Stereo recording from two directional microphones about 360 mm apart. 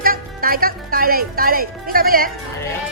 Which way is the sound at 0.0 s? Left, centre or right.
Right.